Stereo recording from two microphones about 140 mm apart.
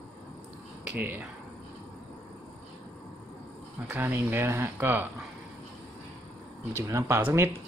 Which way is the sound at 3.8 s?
15° right (ahead or behind).